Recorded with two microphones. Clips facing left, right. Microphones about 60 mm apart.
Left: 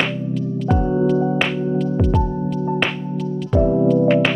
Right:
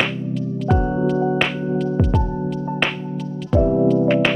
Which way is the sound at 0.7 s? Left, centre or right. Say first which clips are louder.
Left 2 dB; centre.